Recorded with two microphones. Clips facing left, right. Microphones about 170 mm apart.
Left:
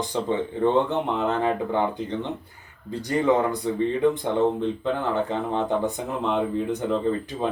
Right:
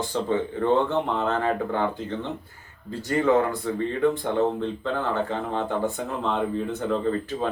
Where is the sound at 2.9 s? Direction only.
15° left (ahead or behind).